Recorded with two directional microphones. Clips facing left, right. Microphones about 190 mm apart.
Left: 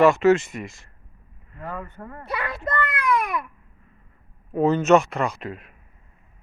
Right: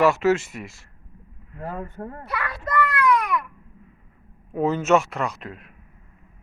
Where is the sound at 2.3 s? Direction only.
25° left (ahead or behind).